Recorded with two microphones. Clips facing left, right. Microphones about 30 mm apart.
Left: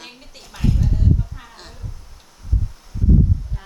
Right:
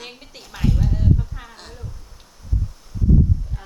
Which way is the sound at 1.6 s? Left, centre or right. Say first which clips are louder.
Right 1 dB; centre.